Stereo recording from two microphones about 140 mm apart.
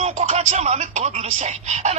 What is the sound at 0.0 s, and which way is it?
A man's voice, 55° right (ahead or behind).